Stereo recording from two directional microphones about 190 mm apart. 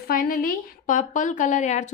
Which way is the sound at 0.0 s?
50° left (ahead or behind).